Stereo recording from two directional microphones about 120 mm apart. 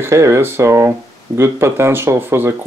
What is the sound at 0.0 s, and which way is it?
Speech, 25° right (ahead or behind).